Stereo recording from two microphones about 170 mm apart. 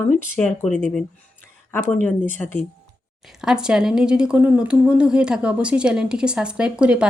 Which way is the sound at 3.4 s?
5° right (ahead or behind).